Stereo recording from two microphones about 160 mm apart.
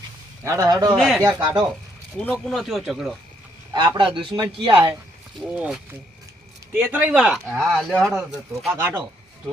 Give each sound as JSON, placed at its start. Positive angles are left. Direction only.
{"t": 0.4, "sound": "a man's voice", "side_deg": -20}
{"t": 0.9, "sound": "speech", "side_deg": 0}
{"t": 1.2, "sound": "a man's voice", "side_deg": -25}
{"t": 2.1, "sound": "speech", "side_deg": 5}
{"t": 3.7, "sound": "a man's voice", "side_deg": -30}
{"t": 5.4, "sound": "speech", "side_deg": -10}
{"t": 8.8, "sound": "speech", "side_deg": -15}